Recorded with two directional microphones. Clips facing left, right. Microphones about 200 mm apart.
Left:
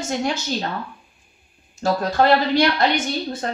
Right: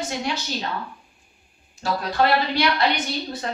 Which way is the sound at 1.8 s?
45° left (ahead or behind).